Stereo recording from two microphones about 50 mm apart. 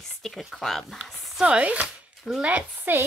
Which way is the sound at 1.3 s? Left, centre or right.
Centre.